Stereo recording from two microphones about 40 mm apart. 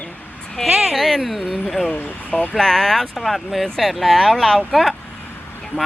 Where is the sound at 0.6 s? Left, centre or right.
Centre.